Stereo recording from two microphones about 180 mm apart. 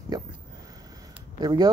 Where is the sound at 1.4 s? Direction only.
25° right (ahead or behind).